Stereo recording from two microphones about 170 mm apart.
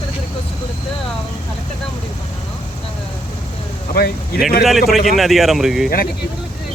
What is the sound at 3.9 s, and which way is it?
Speech, 65° left (ahead or behind).